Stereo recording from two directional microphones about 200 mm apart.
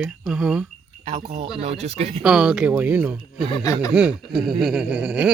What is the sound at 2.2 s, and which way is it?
Speech, 5° right (ahead or behind).